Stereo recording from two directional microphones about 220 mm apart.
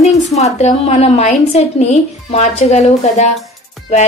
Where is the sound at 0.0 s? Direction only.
30° left (ahead or behind).